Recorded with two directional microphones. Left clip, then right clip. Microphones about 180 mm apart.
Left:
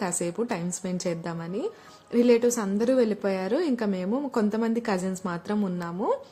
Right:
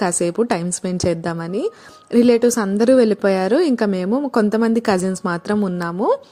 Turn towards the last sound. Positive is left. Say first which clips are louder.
# right 9 dB
turn(degrees=-40)  # may be behind; listen again after turning